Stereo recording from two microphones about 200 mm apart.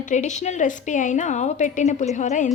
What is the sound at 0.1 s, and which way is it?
Speech, 35° left (ahead or behind).